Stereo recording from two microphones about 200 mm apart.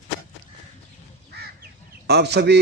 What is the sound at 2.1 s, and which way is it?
Speech, 55° right (ahead or behind).